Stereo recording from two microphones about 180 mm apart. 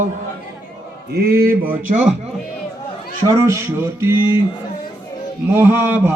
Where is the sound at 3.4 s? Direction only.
15° right (ahead or behind).